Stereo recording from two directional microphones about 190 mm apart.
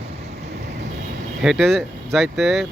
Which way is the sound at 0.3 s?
60° right (ahead or behind).